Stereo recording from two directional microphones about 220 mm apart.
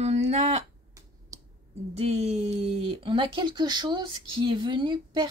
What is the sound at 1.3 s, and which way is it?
Clicking, 15° right (ahead or behind).